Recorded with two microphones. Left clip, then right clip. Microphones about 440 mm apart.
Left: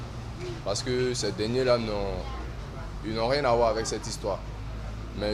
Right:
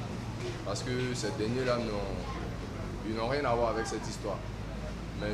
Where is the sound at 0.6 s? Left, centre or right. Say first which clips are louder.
Left 8 dB; left.